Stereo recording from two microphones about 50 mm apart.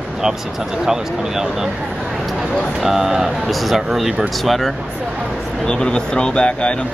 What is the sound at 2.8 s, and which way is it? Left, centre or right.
Speech, centre.